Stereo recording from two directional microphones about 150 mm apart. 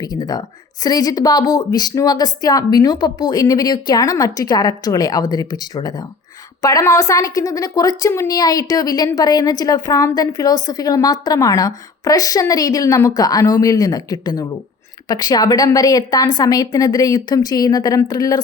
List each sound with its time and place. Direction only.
0.0 s a woman's voice: 25° left (ahead or behind)